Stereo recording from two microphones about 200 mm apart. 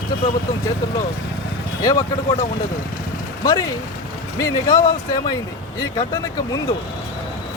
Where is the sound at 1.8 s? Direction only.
15° left (ahead or behind).